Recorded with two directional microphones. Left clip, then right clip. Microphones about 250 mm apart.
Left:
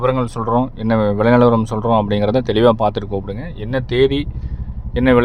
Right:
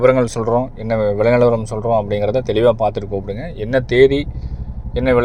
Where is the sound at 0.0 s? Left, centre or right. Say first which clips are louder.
Right 5 dB; centre.